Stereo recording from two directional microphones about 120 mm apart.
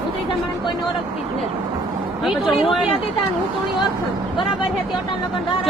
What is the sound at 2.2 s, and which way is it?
Speech, centre (ahead or behind).